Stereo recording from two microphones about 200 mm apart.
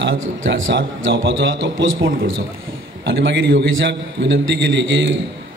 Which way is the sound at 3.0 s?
65° right (ahead or behind).